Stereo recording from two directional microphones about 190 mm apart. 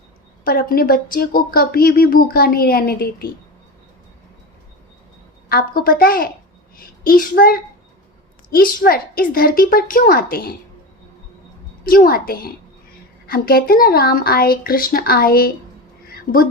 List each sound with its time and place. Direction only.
0.4 s speech: 50° left (ahead or behind)
5.5 s a child's voice: 55° left (ahead or behind)
11.9 s speech: 50° left (ahead or behind)